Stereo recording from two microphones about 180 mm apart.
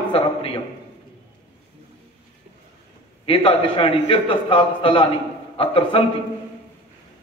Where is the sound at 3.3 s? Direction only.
30° left (ahead or behind).